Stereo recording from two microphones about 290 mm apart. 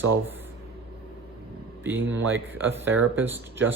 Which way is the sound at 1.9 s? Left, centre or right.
Right.